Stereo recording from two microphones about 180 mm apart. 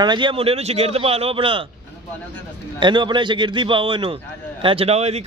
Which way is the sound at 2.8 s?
25° right (ahead or behind).